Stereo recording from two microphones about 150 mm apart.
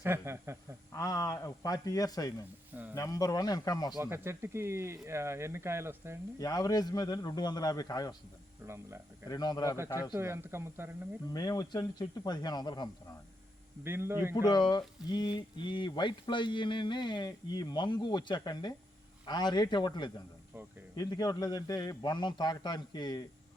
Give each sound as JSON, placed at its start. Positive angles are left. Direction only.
{"t": 0.0, "sound": "speech", "side_deg": -15}
{"t": 0.9, "sound": "speech", "side_deg": 25}
{"t": 3.9, "sound": "speech", "side_deg": -15}
{"t": 6.4, "sound": "speech", "side_deg": 25}
{"t": 8.6, "sound": "speech", "side_deg": -15}
{"t": 9.3, "sound": "speech", "side_deg": 25}
{"t": 10.2, "sound": "speech", "side_deg": -15}
{"t": 11.3, "sound": "speech", "side_deg": 25}
{"t": 13.8, "sound": "speech", "side_deg": -15}
{"t": 14.3, "sound": "speech", "side_deg": 25}